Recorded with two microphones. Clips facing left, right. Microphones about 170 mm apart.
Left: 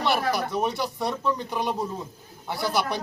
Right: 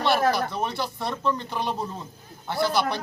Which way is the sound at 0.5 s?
15° left (ahead or behind).